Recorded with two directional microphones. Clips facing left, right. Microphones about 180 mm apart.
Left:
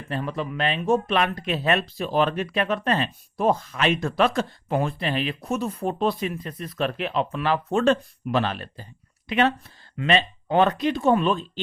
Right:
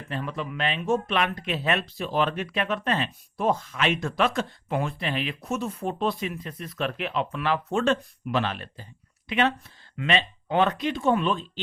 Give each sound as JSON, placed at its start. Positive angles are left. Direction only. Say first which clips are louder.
{"t": 0.1, "sound": "speech", "louder": "left 3 dB", "side_deg": 35}